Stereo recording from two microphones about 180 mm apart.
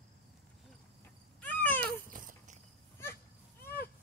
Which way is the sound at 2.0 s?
50° right (ahead or behind).